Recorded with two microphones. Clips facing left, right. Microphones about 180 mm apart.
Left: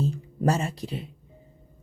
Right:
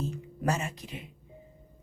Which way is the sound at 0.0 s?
35° left (ahead or behind).